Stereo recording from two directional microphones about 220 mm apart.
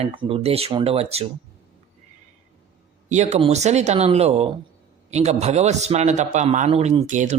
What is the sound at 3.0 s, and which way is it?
A man's voice, 30° right (ahead or behind).